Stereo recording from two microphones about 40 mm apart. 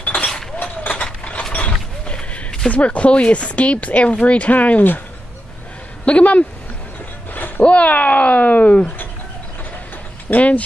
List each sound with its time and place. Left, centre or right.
0.0 s a sound: left
0.6 s mechanisms: left
1.5 s mechanisms: left
2.7 s speech: left
6.0 s speech: left
7.3 s a sound: left
7.6 s speech: left
10.3 s speech: left